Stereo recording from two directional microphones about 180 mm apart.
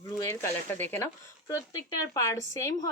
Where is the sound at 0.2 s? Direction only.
15° left (ahead or behind).